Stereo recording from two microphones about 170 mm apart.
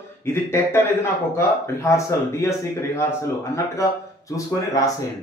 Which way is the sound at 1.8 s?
15° left (ahead or behind).